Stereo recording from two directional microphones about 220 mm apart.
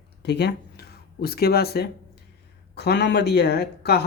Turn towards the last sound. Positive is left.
turn(degrees=45)  # may be behind; listen again after turning